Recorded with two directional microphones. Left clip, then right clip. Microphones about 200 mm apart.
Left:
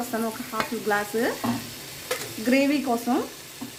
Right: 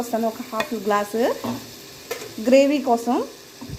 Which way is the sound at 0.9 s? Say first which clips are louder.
Right 4 dB; 20° right (ahead or behind).